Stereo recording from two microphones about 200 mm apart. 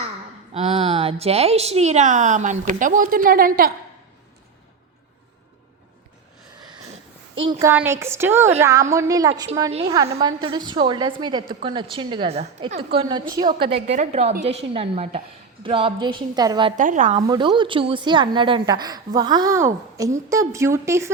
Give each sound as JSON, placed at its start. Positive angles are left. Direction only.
{"t": 0.5, "sound": "a woman's voice", "side_deg": -30}
{"t": 7.6, "sound": "a woman's voice", "side_deg": -10}
{"t": 13.8, "sound": "a woman's voice", "side_deg": -35}
{"t": 16.7, "sound": "a woman's voice", "side_deg": -40}
{"t": 17.2, "sound": "a woman's voice", "side_deg": -20}